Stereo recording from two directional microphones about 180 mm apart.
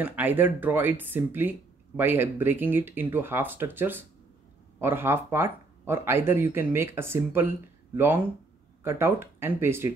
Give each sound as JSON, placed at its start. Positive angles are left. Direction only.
{"t": 0.0, "sound": "speech", "side_deg": -10}